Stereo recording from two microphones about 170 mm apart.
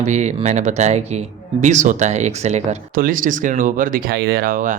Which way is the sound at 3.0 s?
55° right (ahead or behind).